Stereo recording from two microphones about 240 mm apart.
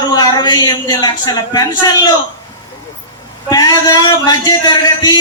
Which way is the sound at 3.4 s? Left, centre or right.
Centre.